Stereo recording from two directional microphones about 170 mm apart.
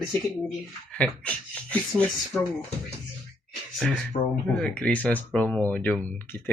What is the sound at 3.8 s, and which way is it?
Speech, 5° left (ahead or behind).